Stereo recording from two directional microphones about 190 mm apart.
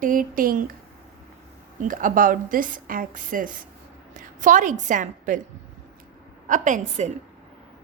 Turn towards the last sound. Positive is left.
turn(degrees=-40)  # may be behind; listen again after turning